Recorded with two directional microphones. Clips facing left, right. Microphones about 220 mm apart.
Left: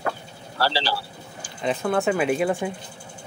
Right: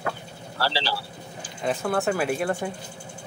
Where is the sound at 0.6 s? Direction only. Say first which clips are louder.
Left 3 dB; 40° left (ahead or behind).